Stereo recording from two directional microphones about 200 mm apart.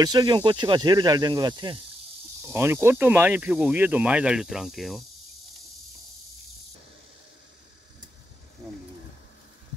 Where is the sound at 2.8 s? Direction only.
10° right (ahead or behind).